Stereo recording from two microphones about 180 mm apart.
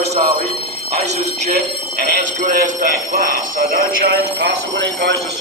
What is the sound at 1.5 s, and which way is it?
Speech, 50° right (ahead or behind).